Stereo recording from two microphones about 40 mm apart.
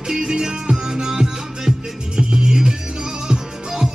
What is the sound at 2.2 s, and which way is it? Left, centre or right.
Music, right.